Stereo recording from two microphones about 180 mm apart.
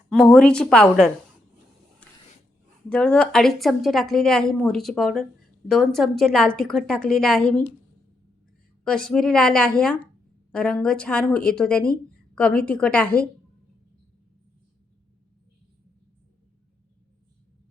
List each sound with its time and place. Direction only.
0.1 s speech: 5° left (ahead or behind)
2.0 s printer: 5° left (ahead or behind)
2.9 s speech: 5° left (ahead or behind)
8.8 s speech: 5° left (ahead or behind)